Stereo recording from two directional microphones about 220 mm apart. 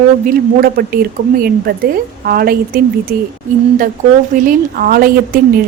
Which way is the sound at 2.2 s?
45° right (ahead or behind).